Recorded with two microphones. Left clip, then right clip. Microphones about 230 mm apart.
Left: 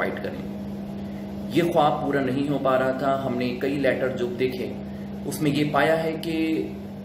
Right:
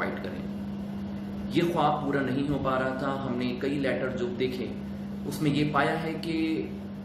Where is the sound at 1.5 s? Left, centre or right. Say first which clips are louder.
Left 5 dB; centre.